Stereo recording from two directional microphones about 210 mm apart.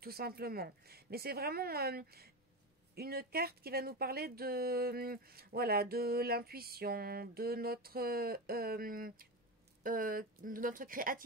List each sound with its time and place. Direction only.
0.0 s speech: 45° right (ahead or behind)